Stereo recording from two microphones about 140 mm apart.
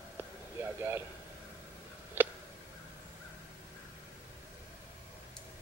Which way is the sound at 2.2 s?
15° right (ahead or behind).